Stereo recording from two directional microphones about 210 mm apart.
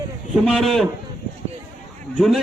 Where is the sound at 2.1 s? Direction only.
Centre (ahead or behind).